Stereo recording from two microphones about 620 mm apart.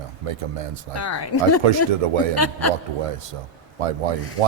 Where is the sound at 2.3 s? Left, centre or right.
Left.